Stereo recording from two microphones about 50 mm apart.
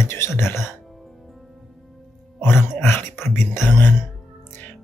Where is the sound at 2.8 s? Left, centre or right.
Left.